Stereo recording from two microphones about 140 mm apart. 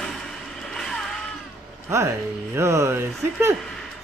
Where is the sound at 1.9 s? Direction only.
20° right (ahead or behind).